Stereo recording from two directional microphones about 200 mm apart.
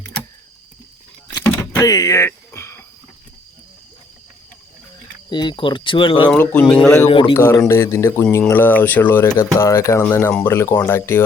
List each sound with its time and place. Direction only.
1.8 s throat clearing: 20° left (ahead or behind)
5.3 s speech: 20° left (ahead or behind)
6.3 s speech: 10° left (ahead or behind)
7.1 s speech: 25° left (ahead or behind)
7.3 s speech: 10° left (ahead or behind)